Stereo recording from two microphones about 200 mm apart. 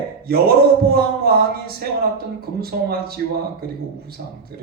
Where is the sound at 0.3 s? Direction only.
50° right (ahead or behind).